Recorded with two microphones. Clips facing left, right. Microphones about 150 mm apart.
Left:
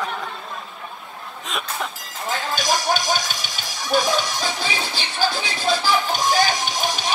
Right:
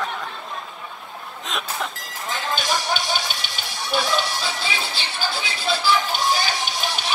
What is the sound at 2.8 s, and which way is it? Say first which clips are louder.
Music: left 3 dB; 40° left (ahead or behind).